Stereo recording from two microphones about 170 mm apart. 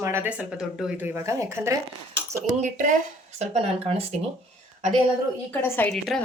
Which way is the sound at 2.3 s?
45° right (ahead or behind).